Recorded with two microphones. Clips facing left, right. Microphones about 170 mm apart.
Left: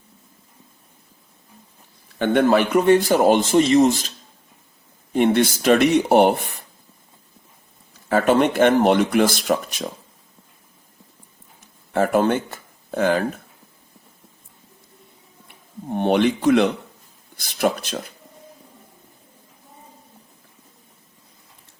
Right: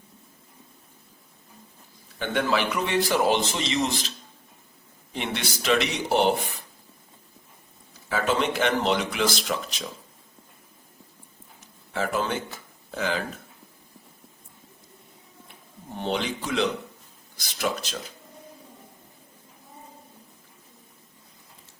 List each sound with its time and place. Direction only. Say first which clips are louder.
2.1 s a man's voice: left 9 dB; 55° left (ahead or behind)
5.1 s a man's voice: left 14 dB; 50° left (ahead or behind)
8.1 s a man's voice: left 8 dB; 55° left (ahead or behind)
11.9 s speech: left 9 dB; 55° left (ahead or behind)
15.9 s speech: left 10 dB; 60° left (ahead or behind)